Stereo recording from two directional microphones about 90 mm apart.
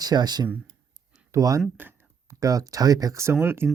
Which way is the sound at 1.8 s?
20° right (ahead or behind).